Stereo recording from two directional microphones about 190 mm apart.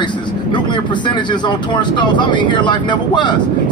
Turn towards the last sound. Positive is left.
turn(degrees=25)  # may be behind; listen again after turning